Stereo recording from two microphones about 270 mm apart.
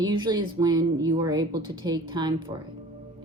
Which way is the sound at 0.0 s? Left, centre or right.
Centre.